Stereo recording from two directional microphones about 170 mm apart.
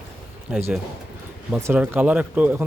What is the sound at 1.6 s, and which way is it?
A man's voice, 15° right (ahead or behind).